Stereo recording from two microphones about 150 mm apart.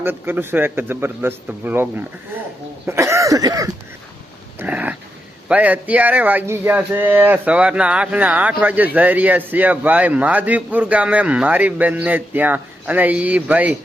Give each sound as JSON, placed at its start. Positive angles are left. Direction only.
{"t": 0.0, "sound": "speech", "side_deg": -15}
{"t": 2.8, "sound": "cough", "side_deg": -20}
{"t": 4.6, "sound": "dog", "side_deg": -10}
{"t": 5.5, "sound": "speech", "side_deg": -10}